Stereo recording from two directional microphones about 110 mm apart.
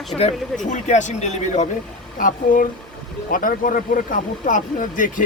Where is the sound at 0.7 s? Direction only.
90° left.